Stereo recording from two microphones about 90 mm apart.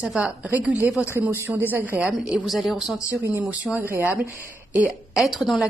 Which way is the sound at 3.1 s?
35° right (ahead or behind).